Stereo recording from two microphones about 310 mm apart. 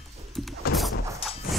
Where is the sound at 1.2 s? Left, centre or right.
Centre.